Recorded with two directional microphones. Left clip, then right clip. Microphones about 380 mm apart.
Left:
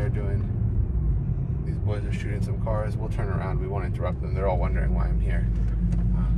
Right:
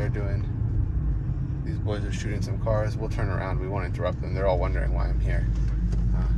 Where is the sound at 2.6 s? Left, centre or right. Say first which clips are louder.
Right 4 dB; right.